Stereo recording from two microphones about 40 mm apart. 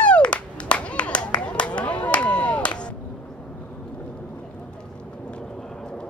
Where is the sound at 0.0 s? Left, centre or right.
Left.